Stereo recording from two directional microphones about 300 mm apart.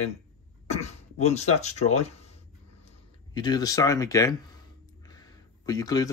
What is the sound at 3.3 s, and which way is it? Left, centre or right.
Speech, centre.